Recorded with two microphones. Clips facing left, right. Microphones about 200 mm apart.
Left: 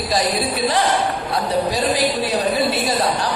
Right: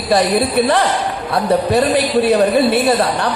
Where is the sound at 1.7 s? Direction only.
60° right (ahead or behind).